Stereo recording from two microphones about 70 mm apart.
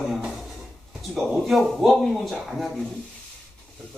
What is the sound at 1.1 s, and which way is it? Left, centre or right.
A man's voice, centre.